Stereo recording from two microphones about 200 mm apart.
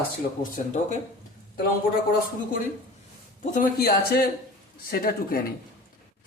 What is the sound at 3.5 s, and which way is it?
Speech, 45° left (ahead or behind).